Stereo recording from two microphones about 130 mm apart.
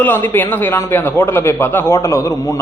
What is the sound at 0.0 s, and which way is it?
A man's voice, 15° left (ahead or behind).